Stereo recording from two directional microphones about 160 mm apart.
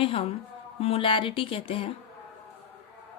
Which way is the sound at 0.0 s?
35° left (ahead or behind).